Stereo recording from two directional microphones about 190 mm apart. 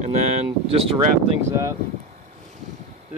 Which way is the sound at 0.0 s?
40° right (ahead or behind).